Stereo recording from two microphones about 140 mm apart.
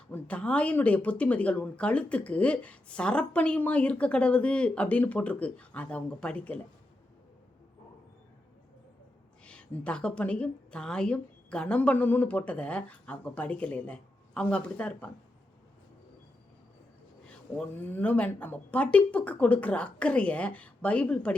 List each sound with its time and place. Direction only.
0.1 s speech: 10° left (ahead or behind)
9.4 s speech: 10° left (ahead or behind)
17.2 s speech: 10° left (ahead or behind)